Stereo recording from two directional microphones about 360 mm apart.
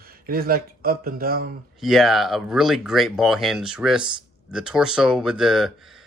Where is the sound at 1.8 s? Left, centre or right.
Centre.